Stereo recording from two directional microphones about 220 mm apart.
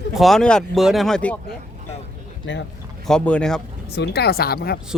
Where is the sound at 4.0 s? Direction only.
45° left (ahead or behind).